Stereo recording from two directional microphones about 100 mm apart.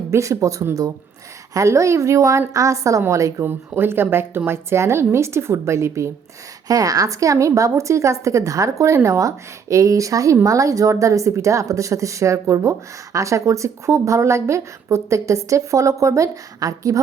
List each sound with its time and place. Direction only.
0.1 s a woman's voice: 30° right (ahead or behind)
3.4 s a woman's voice: 20° right (ahead or behind)